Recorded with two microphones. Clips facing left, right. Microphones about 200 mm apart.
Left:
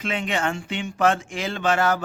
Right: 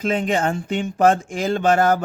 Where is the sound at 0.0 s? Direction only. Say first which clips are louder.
Right 5 dB; 40° right (ahead or behind).